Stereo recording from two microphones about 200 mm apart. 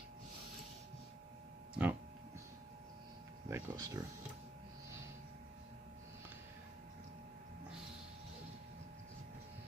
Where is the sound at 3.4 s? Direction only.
15° right (ahead or behind).